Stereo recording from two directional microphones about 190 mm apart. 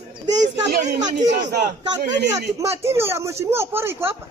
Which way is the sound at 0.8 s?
40° right (ahead or behind).